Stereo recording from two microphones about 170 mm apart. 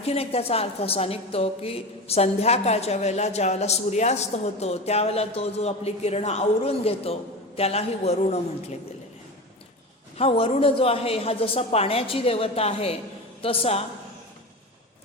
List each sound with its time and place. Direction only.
0.0 s a woman's voice: 35° left (ahead or behind)
10.2 s a woman's voice: 35° left (ahead or behind)